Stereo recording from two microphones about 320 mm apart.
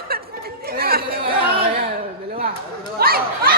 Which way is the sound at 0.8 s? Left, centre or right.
Right.